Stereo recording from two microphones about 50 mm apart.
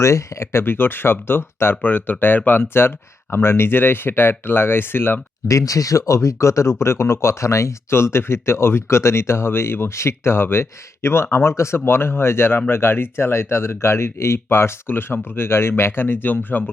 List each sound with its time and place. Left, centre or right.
0.0 s speech: left
0.6 s speech: left
1.7 s speech: left
5.5 s speech: left